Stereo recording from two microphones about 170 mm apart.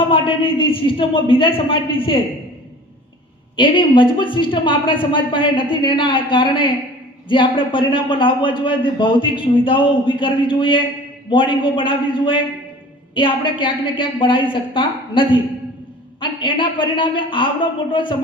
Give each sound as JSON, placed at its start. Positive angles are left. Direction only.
{"t": 0.1, "sound": "a man's voice", "side_deg": 30}
{"t": 3.5, "sound": "a man's voice", "side_deg": 30}